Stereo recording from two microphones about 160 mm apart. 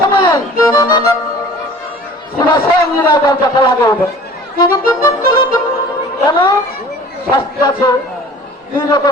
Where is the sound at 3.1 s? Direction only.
25° left (ahead or behind).